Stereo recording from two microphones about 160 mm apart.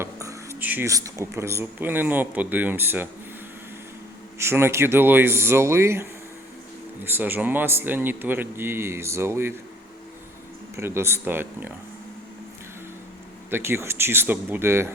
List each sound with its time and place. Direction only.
0.0 s speech: 15° right (ahead or behind)
4.4 s speech: 15° right (ahead or behind)
10.8 s speech: 15° right (ahead or behind)
13.5 s speech: 15° right (ahead or behind)